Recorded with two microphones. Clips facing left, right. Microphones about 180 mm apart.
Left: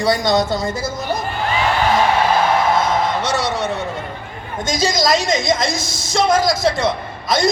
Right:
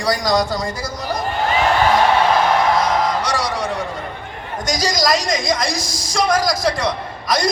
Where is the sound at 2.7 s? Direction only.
25° left (ahead or behind).